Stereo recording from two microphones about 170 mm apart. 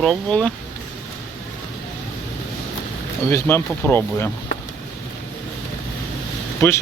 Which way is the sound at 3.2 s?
15° left (ahead or behind).